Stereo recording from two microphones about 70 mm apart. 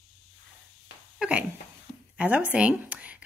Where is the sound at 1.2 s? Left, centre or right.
Centre.